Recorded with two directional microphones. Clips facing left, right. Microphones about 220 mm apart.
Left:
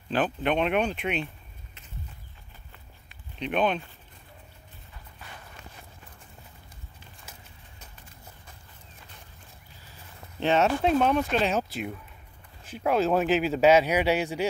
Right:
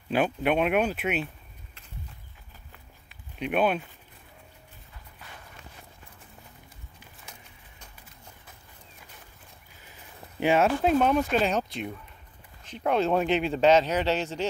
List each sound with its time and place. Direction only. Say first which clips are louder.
0.1 s speech: right 1 dB; 10° right (ahead or behind)
3.1 s a sound: right 1 dB; 5° right (ahead or behind)
9.8 s a man's voice: right 1 dB; 20° right (ahead or behind); by 14.5 s 10° left (ahead or behind)